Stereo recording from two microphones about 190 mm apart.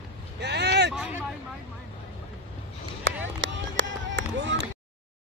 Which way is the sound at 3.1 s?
75° right (ahead or behind).